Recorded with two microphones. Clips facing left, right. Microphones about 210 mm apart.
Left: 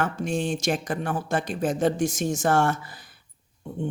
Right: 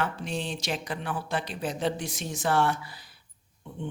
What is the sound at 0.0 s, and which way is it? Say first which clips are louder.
Speech: left 5 dB; 50° left (ahead or behind).